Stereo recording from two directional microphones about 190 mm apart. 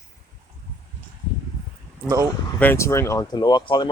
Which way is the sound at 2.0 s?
15° right (ahead or behind).